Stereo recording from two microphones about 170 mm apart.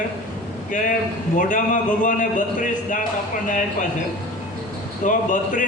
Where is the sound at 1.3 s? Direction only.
50° left (ahead or behind).